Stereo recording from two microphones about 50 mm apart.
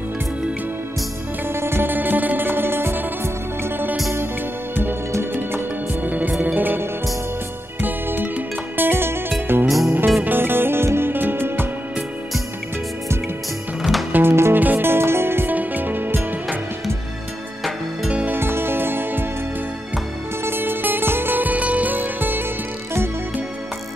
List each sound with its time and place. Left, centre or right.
1.5 s music: right
6.0 s music: right
14.1 s music: right
14.5 s music: right
14.9 s music: right
15.5 s music: right
18.0 s music: right
18.3 s music: right
20.4 s music: right